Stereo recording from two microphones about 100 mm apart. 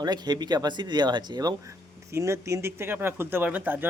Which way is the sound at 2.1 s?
30° right (ahead or behind).